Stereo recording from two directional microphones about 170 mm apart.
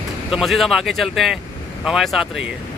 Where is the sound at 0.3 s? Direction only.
Centre (ahead or behind).